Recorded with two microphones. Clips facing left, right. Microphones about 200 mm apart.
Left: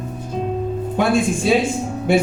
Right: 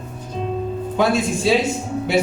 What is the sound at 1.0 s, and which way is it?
A man's voice, 50° left (ahead or behind).